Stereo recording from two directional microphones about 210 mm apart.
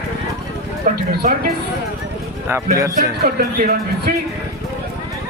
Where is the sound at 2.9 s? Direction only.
45° right (ahead or behind).